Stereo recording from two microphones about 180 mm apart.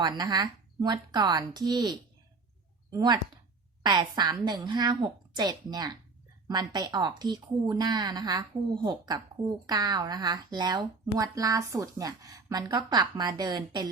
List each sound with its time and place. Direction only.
0.0 s speech: 20° right (ahead or behind)